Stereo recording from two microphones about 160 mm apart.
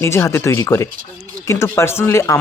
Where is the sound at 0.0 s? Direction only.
15° left (ahead or behind).